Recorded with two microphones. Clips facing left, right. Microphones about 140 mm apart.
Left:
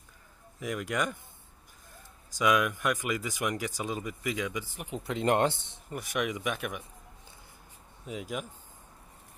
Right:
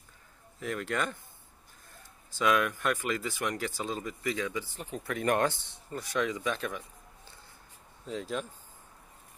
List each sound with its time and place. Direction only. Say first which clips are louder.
0.6 s speech: left 1 dB; 10° left (ahead or behind)
2.3 s speech: left 1 dB; 10° left (ahead or behind)
8.0 s speech: right 2 dB; 10° left (ahead or behind)